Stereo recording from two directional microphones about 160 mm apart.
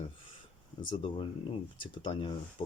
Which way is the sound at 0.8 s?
30° left (ahead or behind).